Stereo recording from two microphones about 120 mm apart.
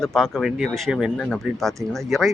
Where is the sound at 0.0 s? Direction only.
5° left (ahead or behind).